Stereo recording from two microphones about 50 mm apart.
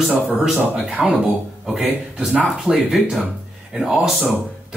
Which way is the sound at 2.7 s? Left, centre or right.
Centre.